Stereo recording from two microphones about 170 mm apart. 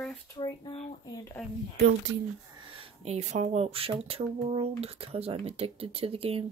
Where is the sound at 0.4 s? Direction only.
30° left (ahead or behind).